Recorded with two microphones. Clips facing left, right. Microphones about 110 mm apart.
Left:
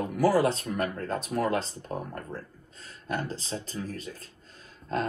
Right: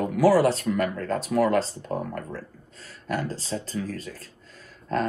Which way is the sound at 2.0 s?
90° right.